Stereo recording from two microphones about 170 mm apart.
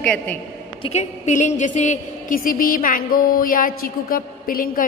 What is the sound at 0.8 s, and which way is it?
A woman's voice, 40° left (ahead or behind).